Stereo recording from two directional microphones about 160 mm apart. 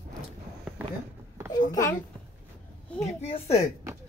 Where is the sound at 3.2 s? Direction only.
40° left (ahead or behind).